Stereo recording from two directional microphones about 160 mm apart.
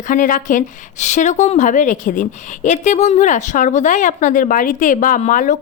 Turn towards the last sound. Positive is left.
turn(degrees=55)  # may be behind; listen again after turning